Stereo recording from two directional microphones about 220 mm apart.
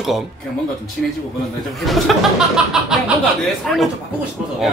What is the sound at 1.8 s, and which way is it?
Speech, centre (ahead or behind).